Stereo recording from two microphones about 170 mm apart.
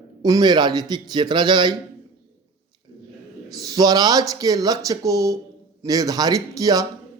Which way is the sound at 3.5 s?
20° right (ahead or behind).